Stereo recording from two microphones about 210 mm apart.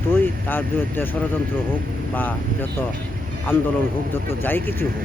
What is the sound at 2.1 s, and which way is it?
Speech, 10° left (ahead or behind).